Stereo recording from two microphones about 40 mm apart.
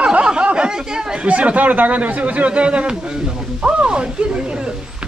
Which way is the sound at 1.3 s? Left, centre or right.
Right.